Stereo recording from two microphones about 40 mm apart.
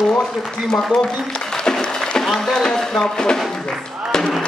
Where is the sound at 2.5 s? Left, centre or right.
Centre.